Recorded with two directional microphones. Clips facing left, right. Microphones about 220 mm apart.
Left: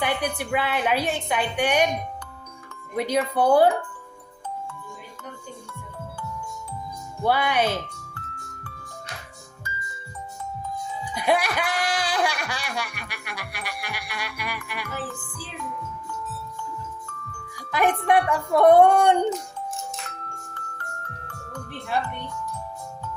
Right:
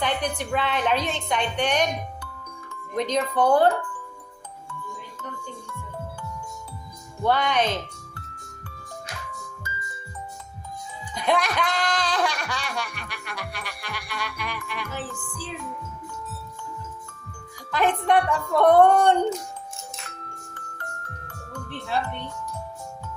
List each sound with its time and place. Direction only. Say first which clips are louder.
0.0 s speech: even; 10° left (ahead or behind)
2.9 s speech: left 1 dB; 10° left (ahead or behind)
7.3 s speech: even; 10° left (ahead or behind)
11.1 s speech: left 1 dB; 10° left (ahead or behind)
17.7 s speech: left 1 dB; 10° left (ahead or behind)